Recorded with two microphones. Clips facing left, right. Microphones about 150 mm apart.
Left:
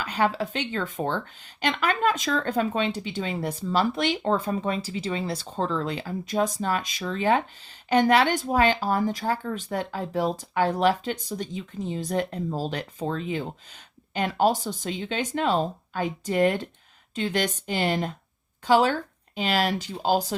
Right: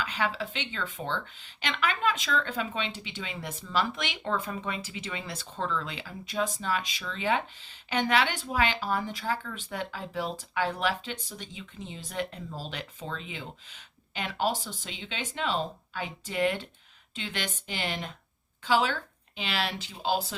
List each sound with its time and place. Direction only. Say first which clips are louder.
0.0 s speech: left 6 dB; 40° left (ahead or behind)